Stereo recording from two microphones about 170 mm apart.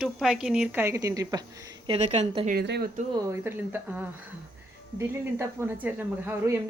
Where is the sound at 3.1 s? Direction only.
15° right (ahead or behind).